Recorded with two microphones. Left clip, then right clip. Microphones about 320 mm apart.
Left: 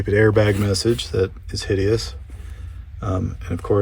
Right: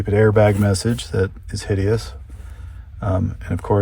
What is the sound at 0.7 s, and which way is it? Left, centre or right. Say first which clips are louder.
Speech: left 2 dB; right.